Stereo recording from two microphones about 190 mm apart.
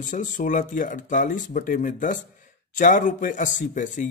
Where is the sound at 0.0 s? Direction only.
40° left (ahead or behind).